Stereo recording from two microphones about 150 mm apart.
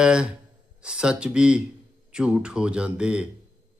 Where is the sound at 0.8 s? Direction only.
5° right (ahead or behind).